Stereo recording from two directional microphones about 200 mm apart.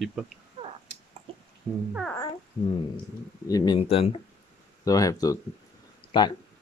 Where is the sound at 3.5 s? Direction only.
25° left (ahead or behind).